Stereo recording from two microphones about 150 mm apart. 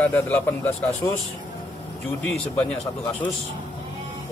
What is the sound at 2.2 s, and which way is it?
A man's voice, 5° left (ahead or behind).